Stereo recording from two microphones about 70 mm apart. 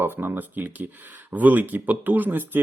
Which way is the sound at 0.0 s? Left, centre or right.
Right.